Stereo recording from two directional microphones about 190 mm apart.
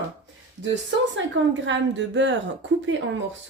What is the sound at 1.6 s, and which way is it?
A woman's voice, 75° right (ahead or behind).